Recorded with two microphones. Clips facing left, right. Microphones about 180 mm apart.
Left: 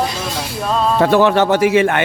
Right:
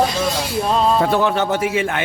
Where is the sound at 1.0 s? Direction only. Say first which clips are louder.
Left 5 dB; 80° left.